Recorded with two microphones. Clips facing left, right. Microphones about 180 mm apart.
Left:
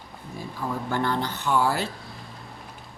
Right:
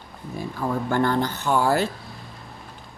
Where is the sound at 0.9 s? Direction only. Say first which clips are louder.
Right 4 dB; 50° right (ahead or behind).